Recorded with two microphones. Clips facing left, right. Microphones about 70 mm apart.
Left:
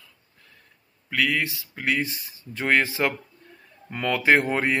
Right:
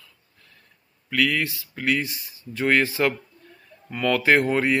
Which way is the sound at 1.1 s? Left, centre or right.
Left.